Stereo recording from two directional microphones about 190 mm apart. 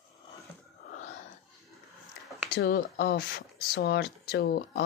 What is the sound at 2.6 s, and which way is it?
Speech, 55° left (ahead or behind).